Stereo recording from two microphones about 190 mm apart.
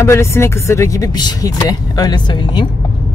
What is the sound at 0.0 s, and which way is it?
Speech, 15° left (ahead or behind).